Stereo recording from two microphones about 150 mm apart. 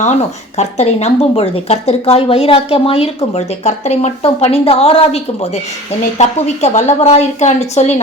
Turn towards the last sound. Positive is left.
turn(degrees=50)  # may be behind; listen again after turning